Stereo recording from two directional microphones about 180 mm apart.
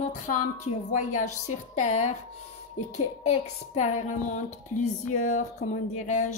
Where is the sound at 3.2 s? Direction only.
40° left (ahead or behind).